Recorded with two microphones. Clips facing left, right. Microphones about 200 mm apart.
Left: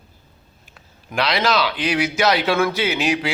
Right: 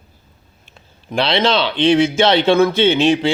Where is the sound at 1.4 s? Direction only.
25° right (ahead or behind).